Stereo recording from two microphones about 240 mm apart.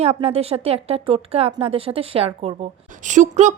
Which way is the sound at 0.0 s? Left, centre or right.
Right.